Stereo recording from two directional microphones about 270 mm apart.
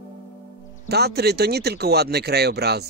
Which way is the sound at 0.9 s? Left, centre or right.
Right.